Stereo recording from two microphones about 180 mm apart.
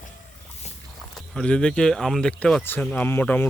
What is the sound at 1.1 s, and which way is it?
Speech, 5° left (ahead or behind).